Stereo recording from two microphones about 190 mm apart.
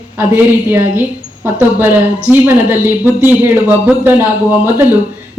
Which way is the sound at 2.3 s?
10° right (ahead or behind).